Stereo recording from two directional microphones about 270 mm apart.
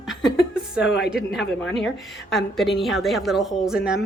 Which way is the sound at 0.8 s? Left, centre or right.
Left.